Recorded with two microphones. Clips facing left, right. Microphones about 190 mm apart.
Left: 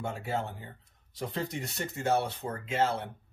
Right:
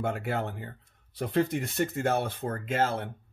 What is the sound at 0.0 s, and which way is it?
Speech, 65° right (ahead or behind).